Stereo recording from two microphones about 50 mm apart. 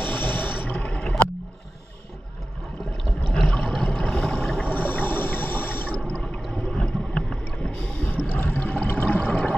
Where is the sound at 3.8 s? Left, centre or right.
Left.